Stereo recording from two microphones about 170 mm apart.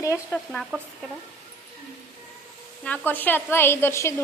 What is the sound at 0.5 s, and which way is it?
Speech, centre (ahead or behind).